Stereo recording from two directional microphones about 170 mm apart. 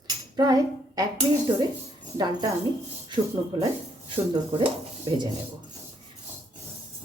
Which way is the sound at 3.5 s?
25° right (ahead or behind).